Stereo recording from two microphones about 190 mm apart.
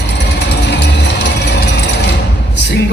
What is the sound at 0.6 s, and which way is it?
Music, 65° left (ahead or behind).